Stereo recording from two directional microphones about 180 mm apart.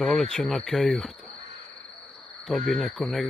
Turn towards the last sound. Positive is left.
turn(degrees=0)  # may be behind; listen again after turning